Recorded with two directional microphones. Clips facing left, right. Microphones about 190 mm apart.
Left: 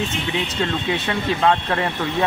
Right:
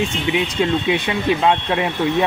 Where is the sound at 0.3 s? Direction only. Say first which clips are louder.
Right 6 dB; 15° right (ahead or behind).